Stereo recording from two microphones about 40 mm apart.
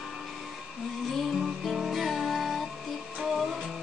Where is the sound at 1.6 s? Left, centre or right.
Centre.